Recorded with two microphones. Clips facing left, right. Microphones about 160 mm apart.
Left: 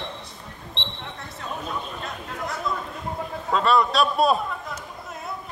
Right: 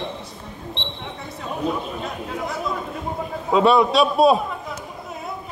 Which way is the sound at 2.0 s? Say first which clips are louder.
Right 5 dB; centre (ahead or behind).